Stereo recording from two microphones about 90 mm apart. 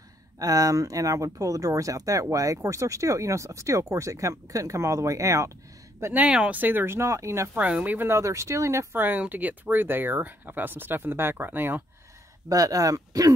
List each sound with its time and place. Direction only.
0.4 s speech: 40° right (ahead or behind)
6.1 s speech: 10° right (ahead or behind); by 7.4 s 30° right (ahead or behind)
7.5 s speech: 15° right (ahead or behind); by 8.8 s 35° right (ahead or behind)
8.9 s speech: 20° right (ahead or behind)
12.4 s speech: 40° right (ahead or behind)